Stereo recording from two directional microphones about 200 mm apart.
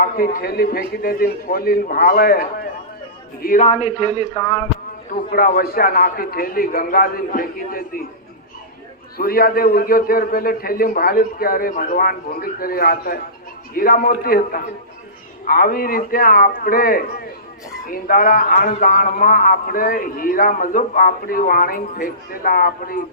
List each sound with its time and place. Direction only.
0.0 s a man's voice: 45° left (ahead or behind); by 4.6 s 25° left (ahead or behind)
5.3 s a man's voice: 45° left (ahead or behind)
9.1 s a man's voice: 45° left (ahead or behind)